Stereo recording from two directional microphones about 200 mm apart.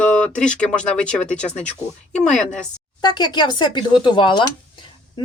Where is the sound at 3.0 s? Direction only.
20° left (ahead or behind).